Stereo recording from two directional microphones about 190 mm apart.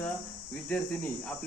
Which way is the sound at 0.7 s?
5° left (ahead or behind).